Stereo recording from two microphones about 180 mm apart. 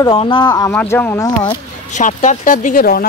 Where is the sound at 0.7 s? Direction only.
10° left (ahead or behind).